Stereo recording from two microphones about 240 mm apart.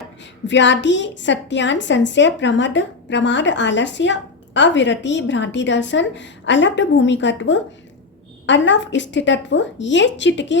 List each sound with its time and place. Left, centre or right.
0.4 s a woman's voice: left